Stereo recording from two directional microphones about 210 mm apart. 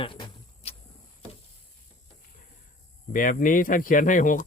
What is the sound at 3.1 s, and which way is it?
Speech, 40° left (ahead or behind).